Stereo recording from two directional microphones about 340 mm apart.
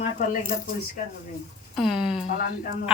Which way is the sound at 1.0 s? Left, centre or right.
Left.